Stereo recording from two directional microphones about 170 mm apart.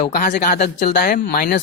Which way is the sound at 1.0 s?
60° left (ahead or behind).